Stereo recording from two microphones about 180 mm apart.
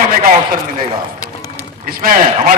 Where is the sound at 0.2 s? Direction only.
55° right (ahead or behind).